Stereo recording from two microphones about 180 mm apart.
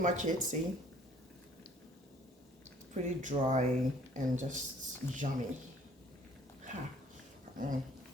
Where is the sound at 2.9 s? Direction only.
45° right (ahead or behind).